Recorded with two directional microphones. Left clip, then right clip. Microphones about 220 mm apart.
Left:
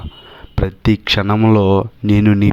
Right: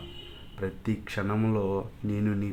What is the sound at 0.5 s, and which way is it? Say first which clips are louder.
Speech: left 16 dB; 40° left (ahead or behind).